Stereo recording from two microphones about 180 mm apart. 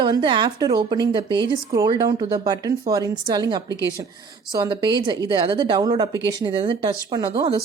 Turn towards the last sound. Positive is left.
turn(degrees=-30)  # may be behind; listen again after turning